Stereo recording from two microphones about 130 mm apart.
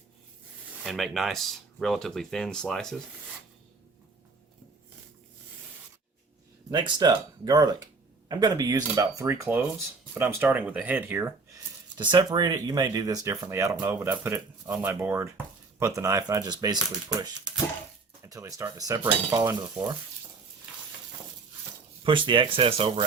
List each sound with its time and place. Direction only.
0.9 s speech: centre (ahead or behind)
6.7 s speech: 35° right (ahead or behind); by 11.3 s 15° right (ahead or behind)
11.9 s speech: 35° right (ahead or behind)
18.2 s speech: 25° right (ahead or behind)
22.0 s speech: 40° right (ahead or behind)